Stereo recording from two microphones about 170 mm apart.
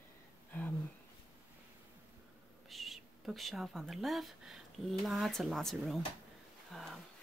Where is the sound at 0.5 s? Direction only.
10° left (ahead or behind).